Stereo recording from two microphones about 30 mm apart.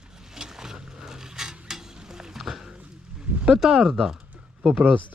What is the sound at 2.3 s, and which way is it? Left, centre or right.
Dog, centre.